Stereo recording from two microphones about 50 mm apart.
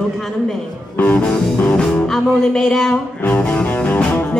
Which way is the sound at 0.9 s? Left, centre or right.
Left.